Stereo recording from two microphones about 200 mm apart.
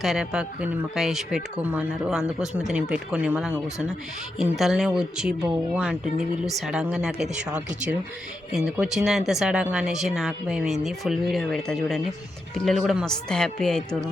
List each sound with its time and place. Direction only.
0.0 s speech: centre (ahead or behind)